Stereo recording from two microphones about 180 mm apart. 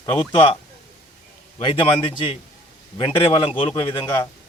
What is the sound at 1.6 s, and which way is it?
Speech, 30° left (ahead or behind).